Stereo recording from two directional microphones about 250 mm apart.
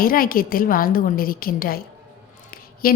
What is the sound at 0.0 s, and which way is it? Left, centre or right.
A woman's voice, left.